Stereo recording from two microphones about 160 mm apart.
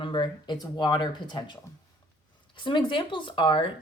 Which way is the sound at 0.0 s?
30° left (ahead or behind).